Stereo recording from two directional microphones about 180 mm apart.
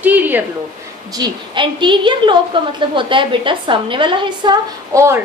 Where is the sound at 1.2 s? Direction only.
25° right (ahead or behind).